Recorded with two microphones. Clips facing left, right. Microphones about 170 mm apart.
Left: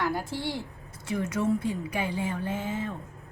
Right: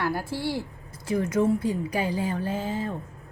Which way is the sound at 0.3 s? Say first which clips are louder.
Right 3 dB; 10° right (ahead or behind).